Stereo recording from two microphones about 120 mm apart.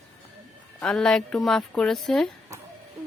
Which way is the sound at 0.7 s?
5° left (ahead or behind).